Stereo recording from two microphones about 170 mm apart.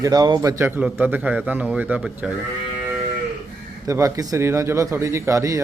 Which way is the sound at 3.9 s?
20° right (ahead or behind).